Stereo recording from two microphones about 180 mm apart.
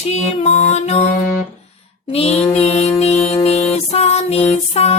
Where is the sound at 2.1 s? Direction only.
35° left (ahead or behind).